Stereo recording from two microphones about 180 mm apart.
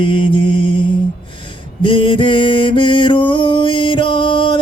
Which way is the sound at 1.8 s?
25° left (ahead or behind).